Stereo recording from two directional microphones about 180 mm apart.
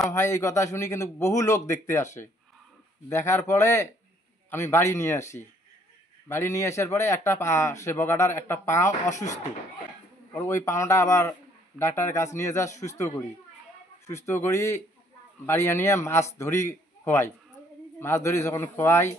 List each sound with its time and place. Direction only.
0.1 s speech: 15° left (ahead or behind)
3.1 s speech: 15° left (ahead or behind)
10.3 s speech: 15° left (ahead or behind)